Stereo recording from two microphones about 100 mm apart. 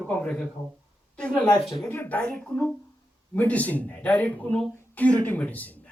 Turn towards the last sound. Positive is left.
turn(degrees=15)  # may be behind; listen again after turning